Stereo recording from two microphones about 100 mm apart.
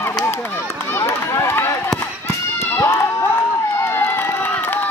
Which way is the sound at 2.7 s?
25° left (ahead or behind).